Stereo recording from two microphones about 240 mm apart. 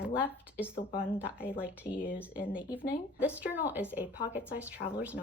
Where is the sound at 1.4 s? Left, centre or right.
Centre.